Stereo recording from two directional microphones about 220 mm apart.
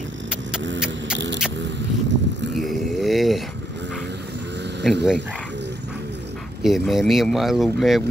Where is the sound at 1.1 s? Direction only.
55° right (ahead or behind).